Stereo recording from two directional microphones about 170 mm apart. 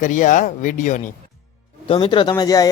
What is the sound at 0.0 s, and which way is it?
Speech, 50° left (ahead or behind).